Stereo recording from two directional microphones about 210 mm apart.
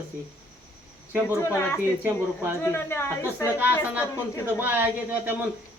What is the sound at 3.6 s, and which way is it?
Speech, 10° right (ahead or behind).